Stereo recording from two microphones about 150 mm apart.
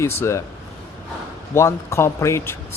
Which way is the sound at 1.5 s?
20° left (ahead or behind).